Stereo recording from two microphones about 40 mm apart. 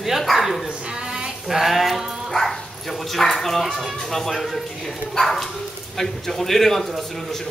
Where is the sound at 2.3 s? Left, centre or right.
Centre.